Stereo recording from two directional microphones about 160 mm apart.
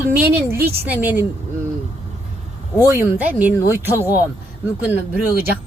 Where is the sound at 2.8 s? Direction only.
15° right (ahead or behind).